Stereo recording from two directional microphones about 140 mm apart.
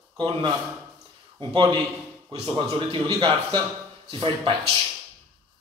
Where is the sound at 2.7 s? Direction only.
35° right (ahead or behind).